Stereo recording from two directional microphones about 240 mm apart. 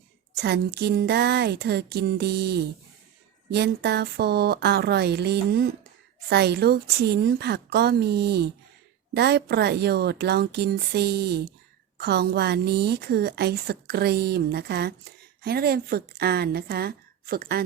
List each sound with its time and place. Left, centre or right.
0.3 s a woman's voice: right